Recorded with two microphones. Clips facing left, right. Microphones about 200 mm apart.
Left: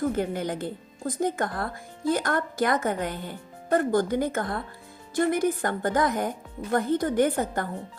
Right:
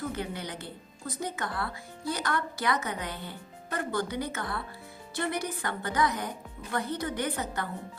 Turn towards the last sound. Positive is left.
turn(degrees=50)  # may be behind; listen again after turning